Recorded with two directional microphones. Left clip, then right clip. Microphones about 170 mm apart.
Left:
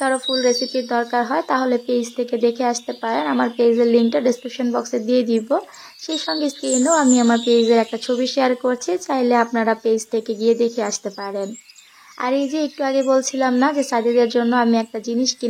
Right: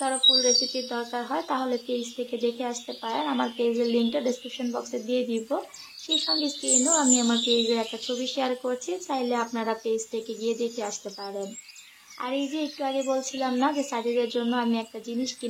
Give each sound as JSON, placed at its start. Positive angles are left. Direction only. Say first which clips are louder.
{"t": 0.0, "sound": "speech", "louder": "left 3 dB", "side_deg": 35}
{"t": 8.1, "sound": "speech", "louder": "left 9 dB", "side_deg": 45}